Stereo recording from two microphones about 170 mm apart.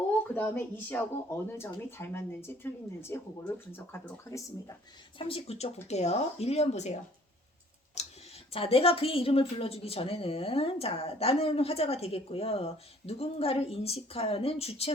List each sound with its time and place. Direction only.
0.3 s speech: 10° left (ahead or behind)
5.1 s a woman's voice: 35° left (ahead or behind)
8.0 s tick: 40° left (ahead or behind)
8.5 s a woman's voice: 35° left (ahead or behind)